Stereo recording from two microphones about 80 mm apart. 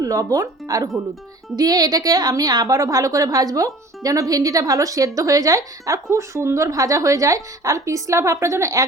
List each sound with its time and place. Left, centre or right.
0.0 s a woman's voice: right